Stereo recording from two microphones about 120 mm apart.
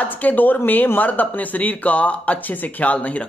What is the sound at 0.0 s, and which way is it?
Speech, 15° left (ahead or behind).